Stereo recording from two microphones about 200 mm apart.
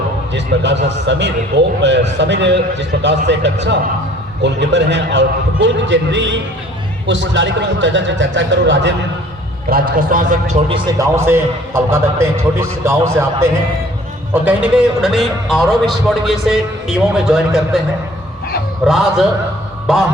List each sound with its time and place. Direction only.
0.3 s a man's voice: 60° right (ahead or behind)
9.6 s speech: 45° right (ahead or behind)
10.7 s a man's voice: 20° right (ahead or behind); by 17.8 s centre (ahead or behind)
18.9 s a man's voice: centre (ahead or behind)